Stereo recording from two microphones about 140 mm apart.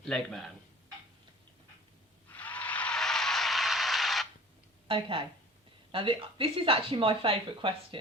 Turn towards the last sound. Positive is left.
turn(degrees=-40)  # may be behind; listen again after turning